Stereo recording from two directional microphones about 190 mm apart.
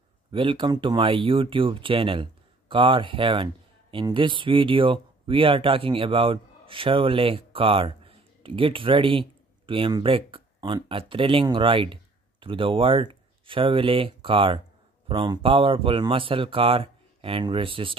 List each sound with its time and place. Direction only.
0.3 s speech: 25° right (ahead or behind)